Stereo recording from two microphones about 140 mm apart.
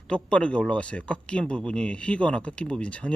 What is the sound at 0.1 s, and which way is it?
A man's voice, 10° left (ahead or behind).